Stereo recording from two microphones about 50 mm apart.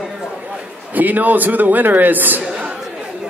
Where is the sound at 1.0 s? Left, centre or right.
Right.